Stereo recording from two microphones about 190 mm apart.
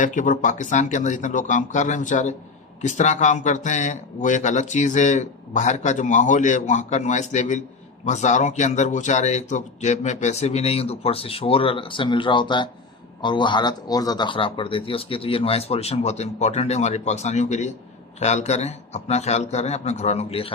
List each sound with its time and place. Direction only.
0.0 s speech: 40° left (ahead or behind)